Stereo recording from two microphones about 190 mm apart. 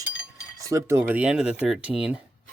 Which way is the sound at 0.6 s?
15° right (ahead or behind).